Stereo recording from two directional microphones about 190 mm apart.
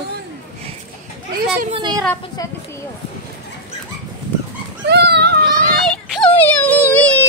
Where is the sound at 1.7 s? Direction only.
20° right (ahead or behind).